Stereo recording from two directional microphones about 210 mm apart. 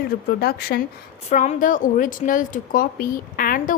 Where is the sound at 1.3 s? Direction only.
35° left (ahead or behind).